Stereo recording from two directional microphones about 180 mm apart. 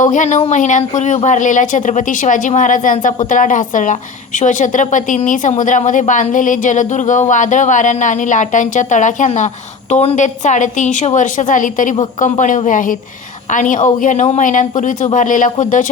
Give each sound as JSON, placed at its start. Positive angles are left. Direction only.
{"t": 0.0, "sound": "speech", "side_deg": 45}